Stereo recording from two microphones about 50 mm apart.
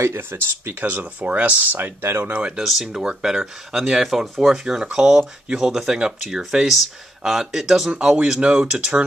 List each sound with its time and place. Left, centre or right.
0.2 s speech: right
2.0 s speech: right
2.6 s speech: centre
2.9 s speech: centre
7.9 s speech: right